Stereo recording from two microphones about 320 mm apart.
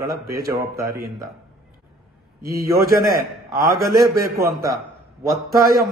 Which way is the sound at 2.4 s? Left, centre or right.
Right.